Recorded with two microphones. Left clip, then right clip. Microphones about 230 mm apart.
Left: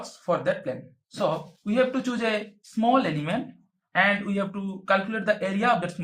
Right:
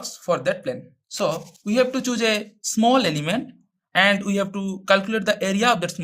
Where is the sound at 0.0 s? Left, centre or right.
Right.